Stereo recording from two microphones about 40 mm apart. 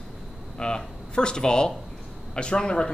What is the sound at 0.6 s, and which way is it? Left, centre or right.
Speech, left.